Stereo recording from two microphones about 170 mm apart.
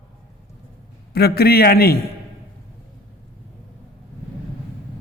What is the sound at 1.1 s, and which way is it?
Speech, 65° left (ahead or behind).